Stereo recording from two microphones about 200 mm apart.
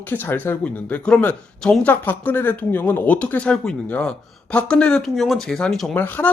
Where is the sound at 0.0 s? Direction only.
10° left (ahead or behind).